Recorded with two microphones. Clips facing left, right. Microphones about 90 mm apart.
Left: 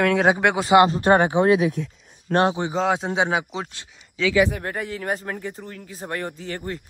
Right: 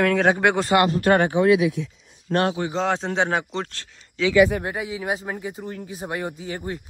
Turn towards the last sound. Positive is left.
turn(degrees=-15)  # may be behind; listen again after turning